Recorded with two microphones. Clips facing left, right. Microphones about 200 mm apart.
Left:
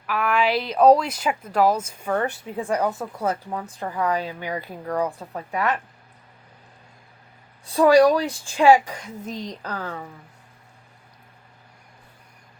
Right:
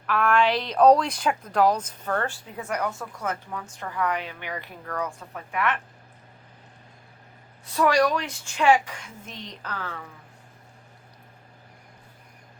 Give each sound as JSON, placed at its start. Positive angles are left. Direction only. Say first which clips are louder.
{"t": 0.1, "sound": "a woman's voice", "louder": "even", "side_deg": 5}
{"t": 7.6, "sound": "a woman's voice", "louder": "left 7 dB", "side_deg": 30}